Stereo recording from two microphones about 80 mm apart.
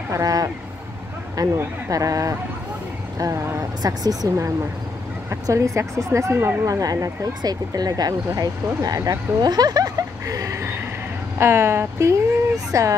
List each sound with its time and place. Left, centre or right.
0.1 s speech: right
3.8 s speech: right
5.3 s speech: right